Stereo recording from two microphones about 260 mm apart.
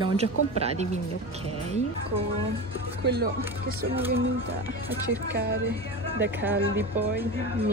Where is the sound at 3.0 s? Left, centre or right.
Right.